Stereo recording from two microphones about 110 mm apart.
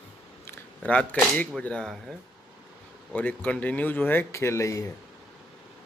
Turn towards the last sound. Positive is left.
turn(degrees=30)  # may be behind; listen again after turning